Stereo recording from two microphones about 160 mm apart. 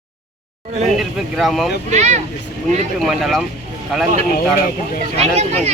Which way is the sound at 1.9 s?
45° right (ahead or behind).